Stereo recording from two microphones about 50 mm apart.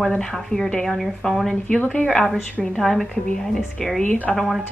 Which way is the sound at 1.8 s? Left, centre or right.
Left.